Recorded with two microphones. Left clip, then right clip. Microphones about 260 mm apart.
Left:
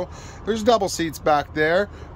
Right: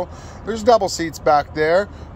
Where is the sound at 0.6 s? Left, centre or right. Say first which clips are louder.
Right 5 dB; left.